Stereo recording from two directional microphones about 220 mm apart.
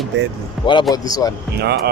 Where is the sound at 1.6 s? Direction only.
45° right (ahead or behind).